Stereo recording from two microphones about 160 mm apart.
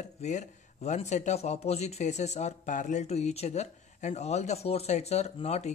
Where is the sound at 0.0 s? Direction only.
45° left (ahead or behind).